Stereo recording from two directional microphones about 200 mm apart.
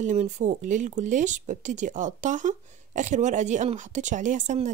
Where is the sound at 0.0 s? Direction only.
35° right (ahead or behind).